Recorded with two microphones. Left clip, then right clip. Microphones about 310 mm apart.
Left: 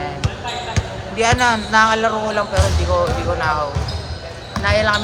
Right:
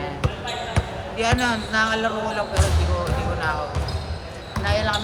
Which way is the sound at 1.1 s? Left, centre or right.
Left.